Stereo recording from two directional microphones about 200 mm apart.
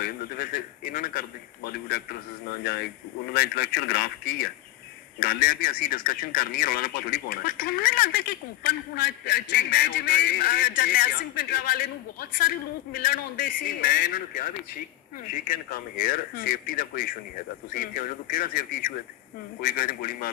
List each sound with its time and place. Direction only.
0.0 s a man's voice: 45° left (ahead or behind)
3.3 s a man's voice: 50° left (ahead or behind)